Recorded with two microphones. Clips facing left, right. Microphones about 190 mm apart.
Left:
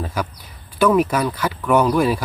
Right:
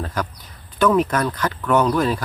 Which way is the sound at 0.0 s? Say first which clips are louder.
Left 1 dB; 10° left (ahead or behind).